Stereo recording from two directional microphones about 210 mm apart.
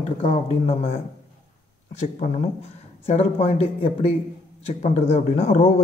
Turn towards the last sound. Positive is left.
turn(degrees=35)  # may be behind; listen again after turning